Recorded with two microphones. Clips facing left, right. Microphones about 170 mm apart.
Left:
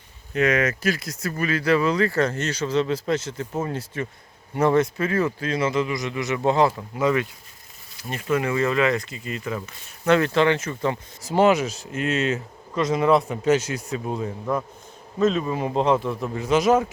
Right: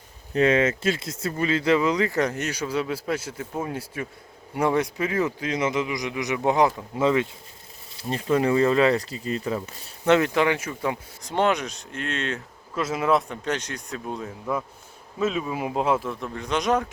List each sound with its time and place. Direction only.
0.3 s speech: 30° right (ahead or behind)
10.1 s speech: 15° right (ahead or behind)
11.2 s speech: 5° left (ahead or behind)